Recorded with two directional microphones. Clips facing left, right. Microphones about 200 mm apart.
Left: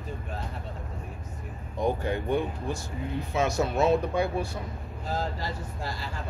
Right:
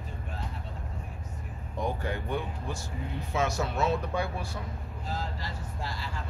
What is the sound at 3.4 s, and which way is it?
Speech, 20° left (ahead or behind).